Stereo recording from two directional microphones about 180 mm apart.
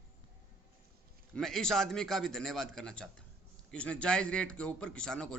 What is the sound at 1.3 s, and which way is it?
A man's voice, 5° left (ahead or behind).